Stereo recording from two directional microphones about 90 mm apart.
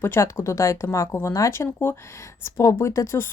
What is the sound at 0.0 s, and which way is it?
A woman's voice, 30° left (ahead or behind).